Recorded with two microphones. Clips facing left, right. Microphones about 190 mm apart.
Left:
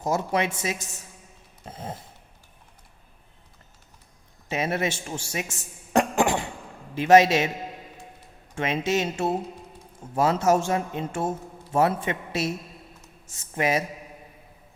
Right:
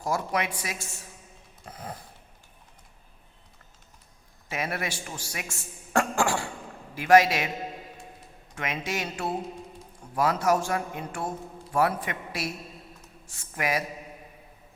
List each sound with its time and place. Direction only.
0.0 s a man's voice: 25° left (ahead or behind)
1.6 s a sound: 25° left (ahead or behind)
4.4 s a man's voice: 25° left (ahead or behind)
8.5 s a man's voice: 25° left (ahead or behind)